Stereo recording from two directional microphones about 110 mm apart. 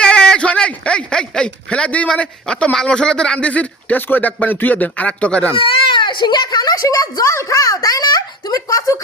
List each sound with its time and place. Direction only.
0.0 s a man's voice: 10° left (ahead or behind)
5.5 s a child's voice: 50° left (ahead or behind); by 9.0 s 30° left (ahead or behind)